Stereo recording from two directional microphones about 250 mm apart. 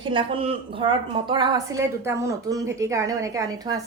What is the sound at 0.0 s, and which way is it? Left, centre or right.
A woman's voice, centre.